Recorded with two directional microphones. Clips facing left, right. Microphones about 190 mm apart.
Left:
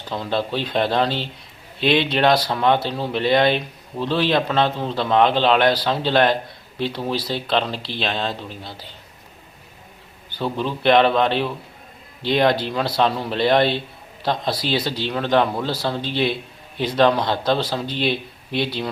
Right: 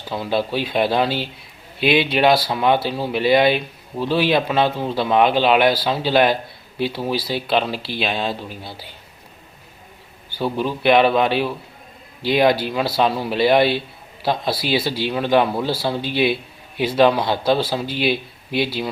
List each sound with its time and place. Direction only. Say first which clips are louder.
0.1 s speech: right 2 dB; 10° right (ahead or behind)
10.3 s speech: right 2 dB; 10° right (ahead or behind)